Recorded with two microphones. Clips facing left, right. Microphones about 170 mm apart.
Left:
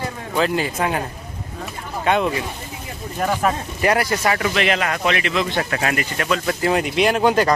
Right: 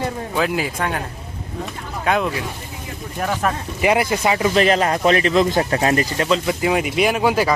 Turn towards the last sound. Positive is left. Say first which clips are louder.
# left 1 dB
turn(degrees=-5)  # may be behind; listen again after turning